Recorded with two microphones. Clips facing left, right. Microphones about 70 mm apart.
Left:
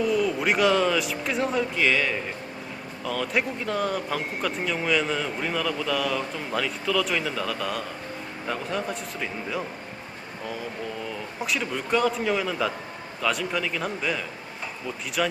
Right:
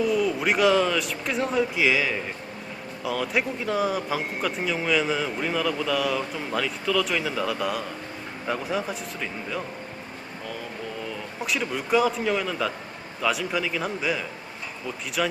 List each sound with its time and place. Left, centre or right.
0.0 s speech: centre
11.3 s speech: centre